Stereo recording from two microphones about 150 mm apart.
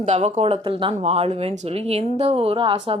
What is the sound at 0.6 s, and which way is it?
Speech, 35° right (ahead or behind).